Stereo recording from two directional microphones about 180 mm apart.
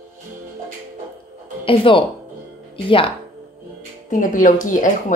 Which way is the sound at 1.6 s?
30° left (ahead or behind).